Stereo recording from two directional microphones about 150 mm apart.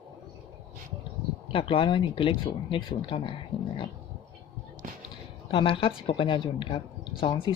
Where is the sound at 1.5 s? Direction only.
35° left (ahead or behind).